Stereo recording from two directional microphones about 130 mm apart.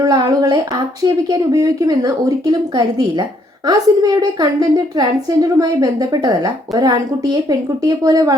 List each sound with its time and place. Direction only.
0.0 s a woman's voice: 30° right (ahead or behind)